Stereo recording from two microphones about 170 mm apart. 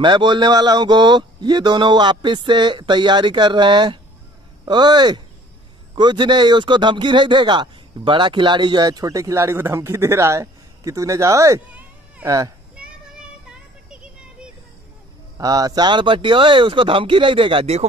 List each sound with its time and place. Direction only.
0.0 s speech: 25° right (ahead or behind)
15.3 s speech: 20° right (ahead or behind)